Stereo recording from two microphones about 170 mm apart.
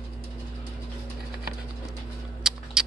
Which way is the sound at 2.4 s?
5° right (ahead or behind).